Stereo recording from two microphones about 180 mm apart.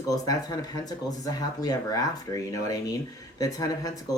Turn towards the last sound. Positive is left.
turn(degrees=20)  # may be behind; listen again after turning